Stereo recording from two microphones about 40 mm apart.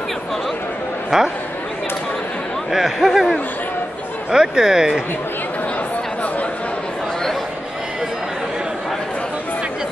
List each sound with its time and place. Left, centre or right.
1.1 s speech: centre
2.7 s speech: centre
4.3 s speech: centre